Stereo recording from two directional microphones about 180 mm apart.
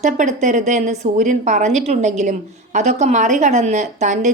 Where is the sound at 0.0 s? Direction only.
40° right (ahead or behind).